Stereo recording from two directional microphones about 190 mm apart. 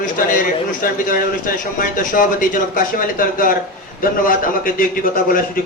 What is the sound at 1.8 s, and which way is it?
Speech, 45° left (ahead or behind).